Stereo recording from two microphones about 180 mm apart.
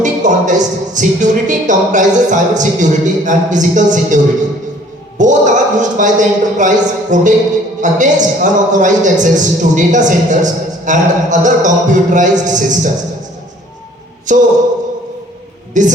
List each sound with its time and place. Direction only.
0.0 s speech: 45° right (ahead or behind)
14.3 s speech: 45° right (ahead or behind)
15.8 s speech: 45° right (ahead or behind)